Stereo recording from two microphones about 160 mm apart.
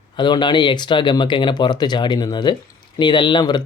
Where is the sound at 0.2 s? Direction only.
30° left (ahead or behind).